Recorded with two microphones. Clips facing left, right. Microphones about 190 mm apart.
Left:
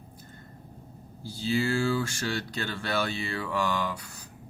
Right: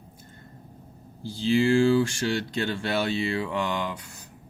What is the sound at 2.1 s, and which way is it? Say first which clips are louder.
Speech: right 5 dB; 25° right (ahead or behind).